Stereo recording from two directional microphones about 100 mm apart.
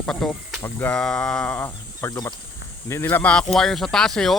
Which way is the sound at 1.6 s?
30° left (ahead or behind).